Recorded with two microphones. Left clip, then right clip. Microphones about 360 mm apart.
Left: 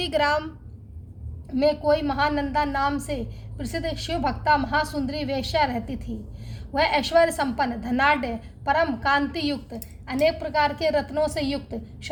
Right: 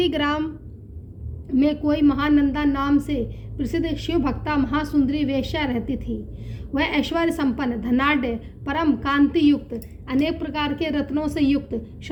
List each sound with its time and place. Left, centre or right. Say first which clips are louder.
0.0 s a woman's voice: even; left
1.5 s a woman's voice: even; left